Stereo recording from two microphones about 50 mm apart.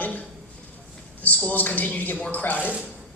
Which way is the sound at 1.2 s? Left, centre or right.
Left.